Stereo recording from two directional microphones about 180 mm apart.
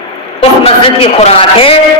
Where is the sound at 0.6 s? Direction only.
30° left (ahead or behind).